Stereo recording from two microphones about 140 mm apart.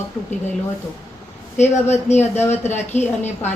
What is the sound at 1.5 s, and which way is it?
A woman's voice, 55° left (ahead or behind).